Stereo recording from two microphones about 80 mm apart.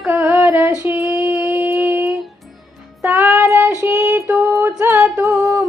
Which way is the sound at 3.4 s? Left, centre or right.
Right.